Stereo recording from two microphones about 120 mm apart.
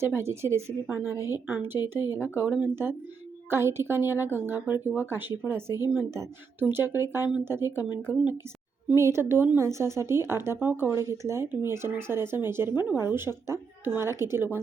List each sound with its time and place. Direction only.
0.2 s a woman's voice: 20° right (ahead or behind)